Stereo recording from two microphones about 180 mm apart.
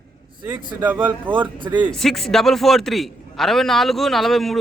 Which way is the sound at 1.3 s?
25° right (ahead or behind).